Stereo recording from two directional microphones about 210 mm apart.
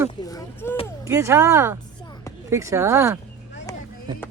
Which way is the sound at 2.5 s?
15° right (ahead or behind).